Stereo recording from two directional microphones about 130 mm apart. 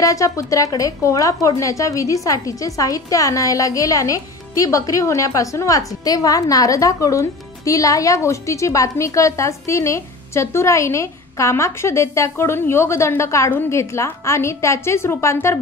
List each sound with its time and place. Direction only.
0.0 s a woman's voice: 25° left (ahead or behind)